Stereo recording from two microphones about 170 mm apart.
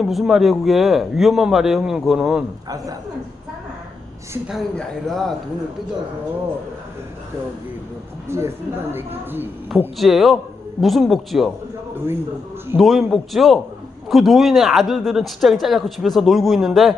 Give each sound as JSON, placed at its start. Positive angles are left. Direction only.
{"t": 0.0, "sound": "speech", "side_deg": 0}
{"t": 2.6, "sound": "a woman's voice", "side_deg": -20}
{"t": 4.4, "sound": "speech", "side_deg": 0}
{"t": 8.3, "sound": "speech", "side_deg": -15}
{"t": 10.0, "sound": "speech", "side_deg": 0}
{"t": 12.7, "sound": "speech", "side_deg": 0}